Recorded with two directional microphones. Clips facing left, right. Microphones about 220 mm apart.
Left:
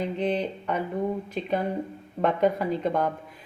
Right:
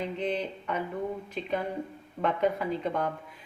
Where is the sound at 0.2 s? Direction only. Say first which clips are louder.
Left 4 dB; 35° left (ahead or behind).